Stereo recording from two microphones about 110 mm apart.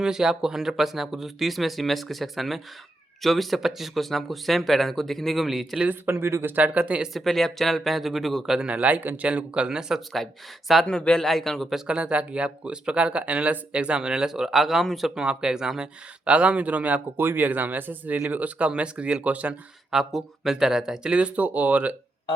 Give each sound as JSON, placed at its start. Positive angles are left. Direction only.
{"t": 0.0, "sound": "speech", "side_deg": -5}
{"t": 5.9, "sound": "speech", "side_deg": -20}
{"t": 7.1, "sound": "speech", "side_deg": 0}
{"t": 11.9, "sound": "speech", "side_deg": -10}